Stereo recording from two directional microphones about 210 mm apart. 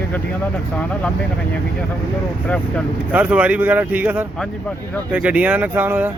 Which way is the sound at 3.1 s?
5° right (ahead or behind).